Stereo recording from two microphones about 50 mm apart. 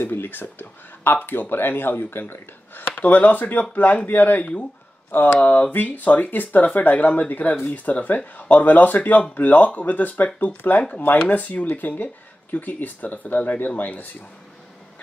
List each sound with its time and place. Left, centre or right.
0.0 s speech: left
3.0 s speech: left